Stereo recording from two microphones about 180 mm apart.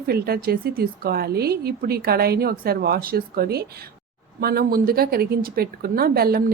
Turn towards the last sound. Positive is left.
turn(degrees=-60)  # may be behind; listen again after turning